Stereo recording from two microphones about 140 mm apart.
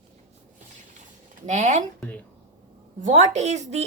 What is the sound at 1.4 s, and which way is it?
Speech, 60° right (ahead or behind).